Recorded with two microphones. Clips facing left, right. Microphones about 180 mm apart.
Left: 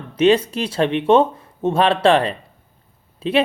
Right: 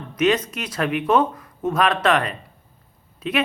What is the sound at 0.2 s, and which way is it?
Speech, 30° left (ahead or behind).